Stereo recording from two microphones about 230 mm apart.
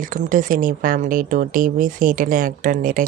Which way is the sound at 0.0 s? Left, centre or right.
Right.